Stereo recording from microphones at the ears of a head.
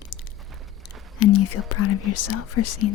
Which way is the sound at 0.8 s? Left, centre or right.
Left.